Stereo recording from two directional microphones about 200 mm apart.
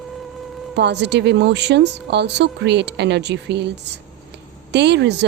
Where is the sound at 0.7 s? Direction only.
60° right (ahead or behind).